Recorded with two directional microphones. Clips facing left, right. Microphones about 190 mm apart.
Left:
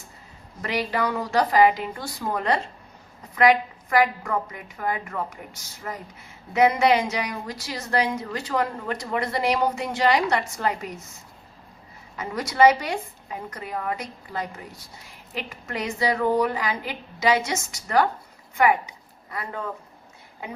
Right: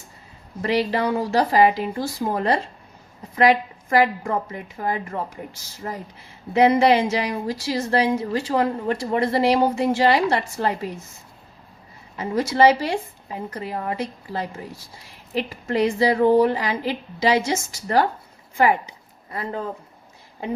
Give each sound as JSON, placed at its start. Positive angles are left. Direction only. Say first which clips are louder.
{"t": 0.6, "sound": "a woman's voice", "louder": "right 4 dB", "side_deg": -30}
{"t": 12.1, "sound": "a woman's voice", "louder": "right 4 dB", "side_deg": -30}